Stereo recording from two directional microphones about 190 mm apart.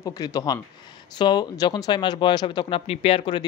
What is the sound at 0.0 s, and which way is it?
Speech, 20° left (ahead or behind).